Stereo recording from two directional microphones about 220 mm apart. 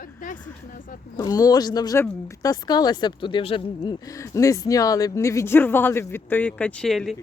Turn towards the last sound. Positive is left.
turn(degrees=0)  # may be behind; listen again after turning